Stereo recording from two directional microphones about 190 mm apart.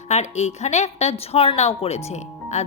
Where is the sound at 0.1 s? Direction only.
35° left (ahead or behind).